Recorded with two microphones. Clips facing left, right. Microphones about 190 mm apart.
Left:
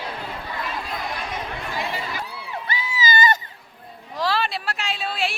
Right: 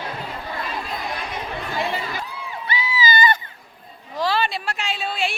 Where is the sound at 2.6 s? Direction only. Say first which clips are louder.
Right 3 dB; 50° left (ahead or behind).